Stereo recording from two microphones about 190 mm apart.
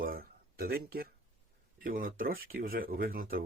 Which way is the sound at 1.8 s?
45° right (ahead or behind).